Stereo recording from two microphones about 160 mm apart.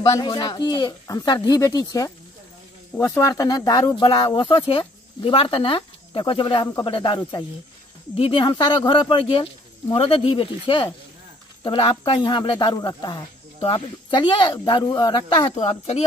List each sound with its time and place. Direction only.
0.0 s speech: 25° left (ahead or behind)
15.5 s speech: 40° left (ahead or behind)